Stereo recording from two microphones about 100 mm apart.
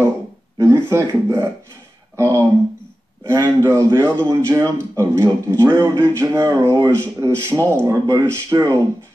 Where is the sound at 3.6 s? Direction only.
30° right (ahead or behind).